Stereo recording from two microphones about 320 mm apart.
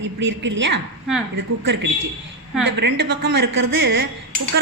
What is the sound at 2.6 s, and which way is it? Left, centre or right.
A woman's voice, right.